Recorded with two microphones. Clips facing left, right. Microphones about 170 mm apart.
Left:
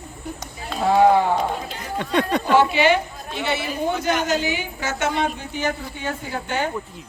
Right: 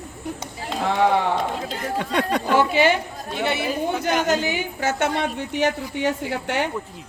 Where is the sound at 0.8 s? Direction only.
75° right (ahead or behind).